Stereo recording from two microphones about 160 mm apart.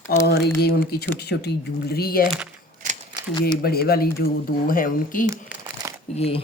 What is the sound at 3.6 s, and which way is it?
Speech, 75° left (ahead or behind).